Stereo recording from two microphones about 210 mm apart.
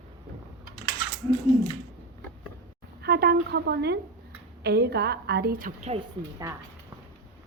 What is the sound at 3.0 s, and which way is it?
A woman's voice, 50° right (ahead or behind).